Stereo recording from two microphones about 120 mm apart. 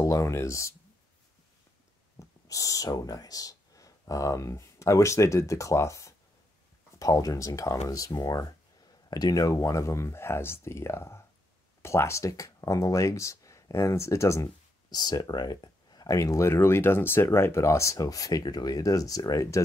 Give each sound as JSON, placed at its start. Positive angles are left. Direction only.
{"t": 0.0, "sound": "speech", "side_deg": 25}
{"t": 2.1, "sound": "speech", "side_deg": 30}